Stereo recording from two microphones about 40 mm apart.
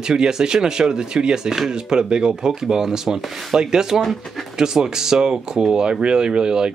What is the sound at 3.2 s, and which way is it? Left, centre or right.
Speech, centre.